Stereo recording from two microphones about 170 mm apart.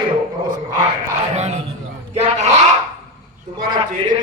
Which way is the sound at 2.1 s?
40° right (ahead or behind).